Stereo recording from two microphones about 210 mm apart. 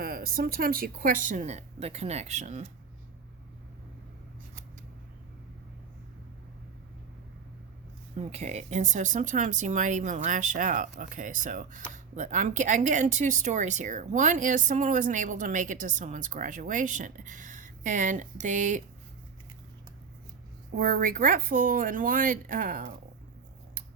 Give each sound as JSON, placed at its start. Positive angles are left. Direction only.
{"t": 0.0, "sound": "speech", "side_deg": -45}
{"t": 8.1, "sound": "speech", "side_deg": -30}
{"t": 20.7, "sound": "speech", "side_deg": -40}